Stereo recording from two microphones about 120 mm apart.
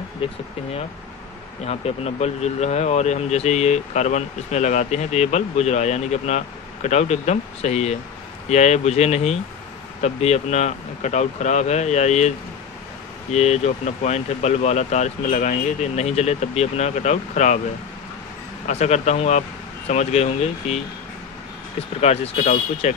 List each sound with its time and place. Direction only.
0.2 s speech: 50° left (ahead or behind)
1.7 s speech: 60° left (ahead or behind); by 17.6 s 80° left
18.7 s speech: 65° left (ahead or behind)